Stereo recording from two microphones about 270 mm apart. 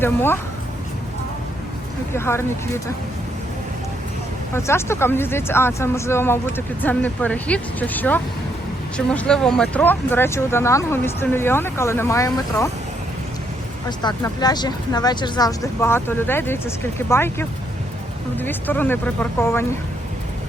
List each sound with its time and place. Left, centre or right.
0.0 s speech: centre
2.1 s speech: centre
4.5 s speech: centre
14.0 s speech: centre